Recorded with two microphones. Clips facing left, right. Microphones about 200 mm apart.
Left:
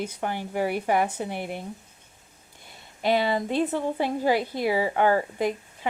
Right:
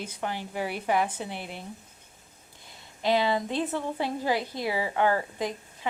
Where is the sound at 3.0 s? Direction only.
55° left (ahead or behind).